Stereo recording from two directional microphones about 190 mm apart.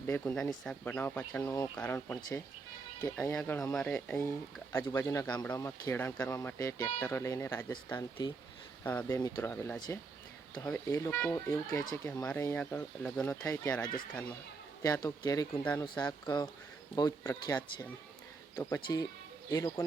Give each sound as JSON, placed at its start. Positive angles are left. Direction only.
{"t": 0.1, "sound": "speech", "side_deg": 10}